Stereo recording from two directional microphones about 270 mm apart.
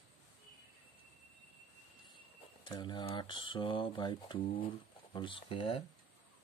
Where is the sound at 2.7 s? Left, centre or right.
Centre.